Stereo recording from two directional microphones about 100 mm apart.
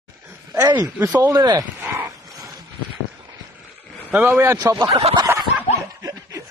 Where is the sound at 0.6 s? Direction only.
40° right (ahead or behind).